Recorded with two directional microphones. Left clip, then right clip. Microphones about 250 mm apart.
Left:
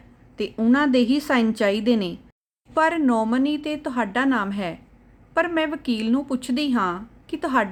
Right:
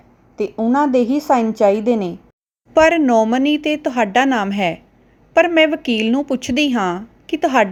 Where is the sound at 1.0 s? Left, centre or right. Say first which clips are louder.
Right 5 dB; centre.